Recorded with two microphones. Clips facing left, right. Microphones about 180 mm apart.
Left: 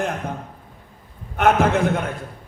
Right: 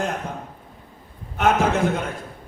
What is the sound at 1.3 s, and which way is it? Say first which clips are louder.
Speech: left 2 dB; 60° left (ahead or behind).